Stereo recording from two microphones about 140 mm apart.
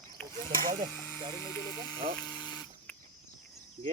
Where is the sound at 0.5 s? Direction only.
80° right.